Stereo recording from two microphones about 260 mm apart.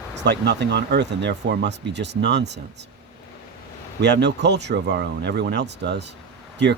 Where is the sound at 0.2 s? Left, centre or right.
Right.